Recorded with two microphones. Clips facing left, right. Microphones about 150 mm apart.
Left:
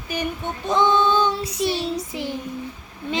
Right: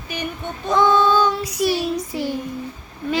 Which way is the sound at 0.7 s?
25° left (ahead or behind).